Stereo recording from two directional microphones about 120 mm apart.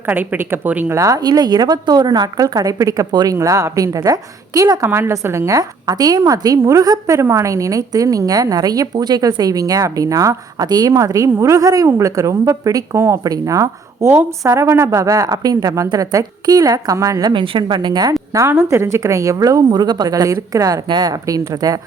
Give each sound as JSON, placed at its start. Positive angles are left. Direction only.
{"t": 0.0, "sound": "a woman's voice", "side_deg": -15}
{"t": 0.9, "sound": "a woman's voice", "side_deg": -30}
{"t": 17.4, "sound": "a woman's voice", "side_deg": -45}
{"t": 18.3, "sound": "a woman's voice", "side_deg": -25}